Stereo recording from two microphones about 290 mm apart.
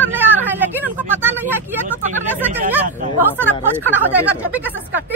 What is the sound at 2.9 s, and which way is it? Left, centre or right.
Chatter, right.